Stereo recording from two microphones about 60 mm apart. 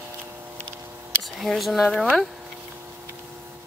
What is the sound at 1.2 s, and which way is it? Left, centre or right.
Speech, centre.